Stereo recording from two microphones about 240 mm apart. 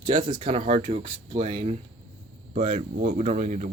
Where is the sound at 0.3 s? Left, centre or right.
Centre.